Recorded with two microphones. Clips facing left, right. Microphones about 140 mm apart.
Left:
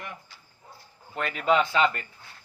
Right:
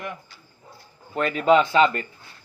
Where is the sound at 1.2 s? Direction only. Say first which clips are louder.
Right 6 dB; 35° right (ahead or behind).